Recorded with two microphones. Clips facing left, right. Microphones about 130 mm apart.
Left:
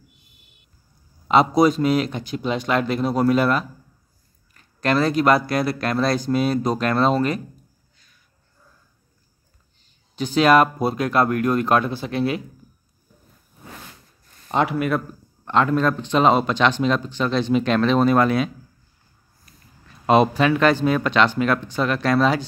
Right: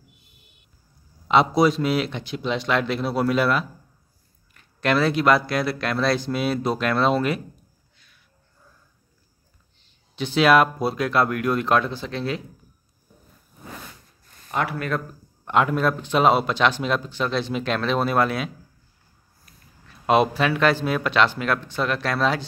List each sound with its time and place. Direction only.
1.2 s speech: centre (ahead or behind)
10.2 s speech: centre (ahead or behind)
14.5 s speech: 20° left (ahead or behind)
14.8 s speech: 5° left (ahead or behind)
15.4 s speech: 10° right (ahead or behind)
20.1 s speech: centre (ahead or behind)